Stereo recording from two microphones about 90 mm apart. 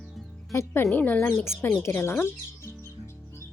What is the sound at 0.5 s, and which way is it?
Speech, 30° left (ahead or behind).